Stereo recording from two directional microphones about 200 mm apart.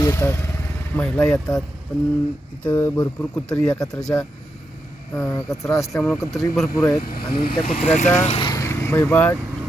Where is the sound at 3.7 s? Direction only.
15° left (ahead or behind).